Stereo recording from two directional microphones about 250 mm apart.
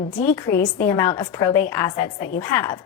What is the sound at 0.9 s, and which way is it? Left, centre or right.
A woman's voice, centre.